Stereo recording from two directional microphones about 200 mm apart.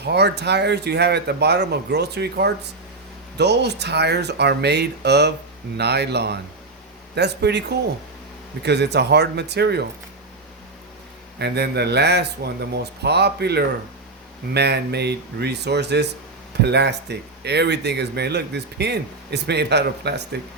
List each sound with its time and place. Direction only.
0.0 s speech: 55° right (ahead or behind)
11.3 s speech: 55° right (ahead or behind)